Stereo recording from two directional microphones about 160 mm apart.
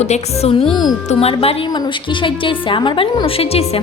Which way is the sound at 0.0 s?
45° left (ahead or behind).